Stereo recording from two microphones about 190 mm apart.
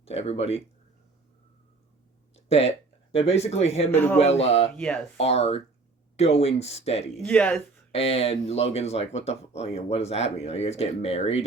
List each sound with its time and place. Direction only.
0.0 s speech: 30° left (ahead or behind)
2.3 s speech: 35° left (ahead or behind)
3.9 s speech: 10° left (ahead or behind)
4.2 s speech: 35° left (ahead or behind)
4.7 s speech: 5° left (ahead or behind)
5.1 s speech: 35° left (ahead or behind)
7.3 s speech: 10° left (ahead or behind)
7.9 s speech: 30° left (ahead or behind)